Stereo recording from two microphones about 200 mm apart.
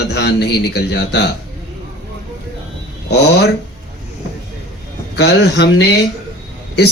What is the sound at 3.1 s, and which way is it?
Speech, 55° left (ahead or behind).